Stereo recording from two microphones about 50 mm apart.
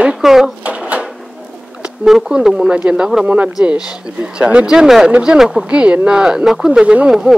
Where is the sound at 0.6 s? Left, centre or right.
Right.